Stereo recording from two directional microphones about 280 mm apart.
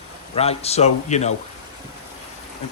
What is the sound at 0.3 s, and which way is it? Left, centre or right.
Speech, left.